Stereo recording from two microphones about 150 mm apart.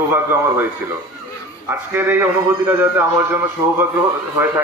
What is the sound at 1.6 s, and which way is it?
Speech, 15° right (ahead or behind).